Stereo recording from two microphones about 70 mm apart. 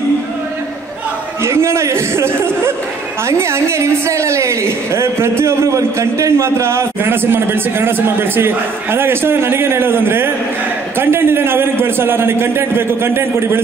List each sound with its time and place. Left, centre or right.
1.4 s a man's voice: right